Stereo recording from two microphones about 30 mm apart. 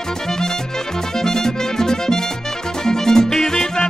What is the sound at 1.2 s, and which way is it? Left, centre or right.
Music, centre.